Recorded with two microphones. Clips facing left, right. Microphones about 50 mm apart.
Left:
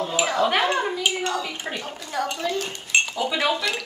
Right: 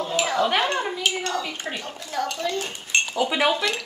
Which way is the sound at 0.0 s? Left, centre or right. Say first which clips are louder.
Left 1 dB; centre.